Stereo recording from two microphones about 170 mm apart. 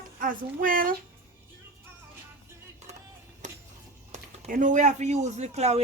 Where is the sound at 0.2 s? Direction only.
55° right (ahead or behind).